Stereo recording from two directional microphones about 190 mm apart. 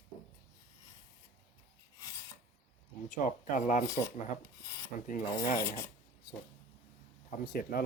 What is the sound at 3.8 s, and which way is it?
Filing, 15° left (ahead or behind).